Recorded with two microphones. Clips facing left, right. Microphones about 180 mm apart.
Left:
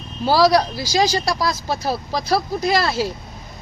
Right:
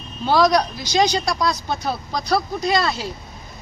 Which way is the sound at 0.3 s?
35° left (ahead or behind).